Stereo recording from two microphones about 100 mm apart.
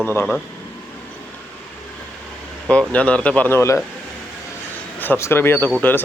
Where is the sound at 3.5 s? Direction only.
30° left (ahead or behind).